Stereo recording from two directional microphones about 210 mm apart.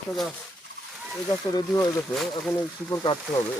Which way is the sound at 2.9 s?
20° left (ahead or behind).